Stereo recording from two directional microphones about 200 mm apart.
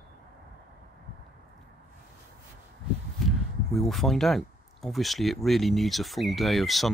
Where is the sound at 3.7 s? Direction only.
Centre (ahead or behind).